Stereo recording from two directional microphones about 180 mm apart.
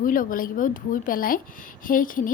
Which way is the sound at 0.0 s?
50° left (ahead or behind).